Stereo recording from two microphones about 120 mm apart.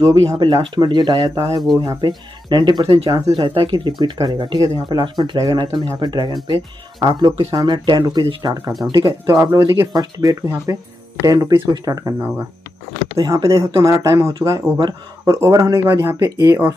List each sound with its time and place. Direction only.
0.0 s speech: 35° right (ahead or behind)
13.2 s speech: 30° right (ahead or behind)